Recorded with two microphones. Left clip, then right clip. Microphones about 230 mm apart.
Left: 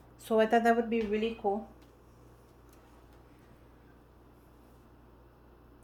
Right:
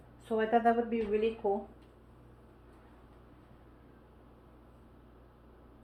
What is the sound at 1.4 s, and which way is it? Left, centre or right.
Speech, left.